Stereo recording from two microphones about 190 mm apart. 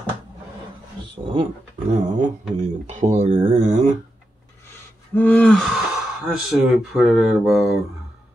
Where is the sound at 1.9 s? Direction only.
40° right (ahead or behind).